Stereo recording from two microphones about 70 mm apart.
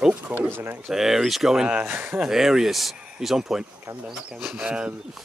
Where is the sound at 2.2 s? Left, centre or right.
Centre.